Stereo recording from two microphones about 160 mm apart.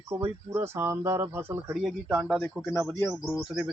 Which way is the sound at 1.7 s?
5° right (ahead or behind).